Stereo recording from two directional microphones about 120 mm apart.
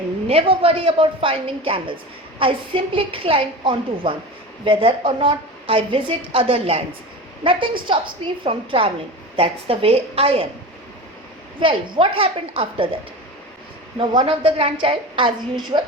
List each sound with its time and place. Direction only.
0.3 s a woman's voice: 55° right (ahead or behind)
11.6 s a woman's voice: 50° right (ahead or behind)
14.3 s a woman's voice: 50° right (ahead or behind)